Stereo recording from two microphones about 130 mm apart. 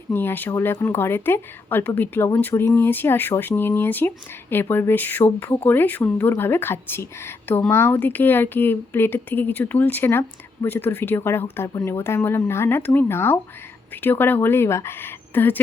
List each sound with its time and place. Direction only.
0.1 s speech: 15° left (ahead or behind)